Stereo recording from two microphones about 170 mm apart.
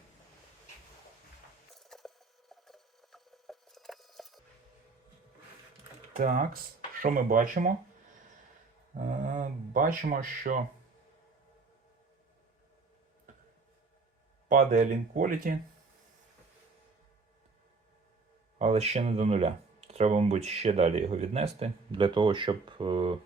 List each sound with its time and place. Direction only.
1.7 s a sound: centre (ahead or behind)
6.1 s speech: 50° right (ahead or behind)
9.0 s speech: 50° right (ahead or behind)
14.4 s speech: 45° right (ahead or behind)
18.6 s speech: 40° right (ahead or behind)